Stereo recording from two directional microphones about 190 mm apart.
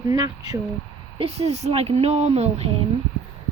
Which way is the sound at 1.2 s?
35° right (ahead or behind).